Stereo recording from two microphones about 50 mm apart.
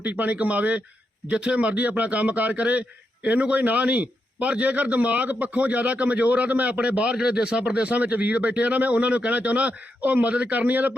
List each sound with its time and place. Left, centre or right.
0.0 s a man's voice: right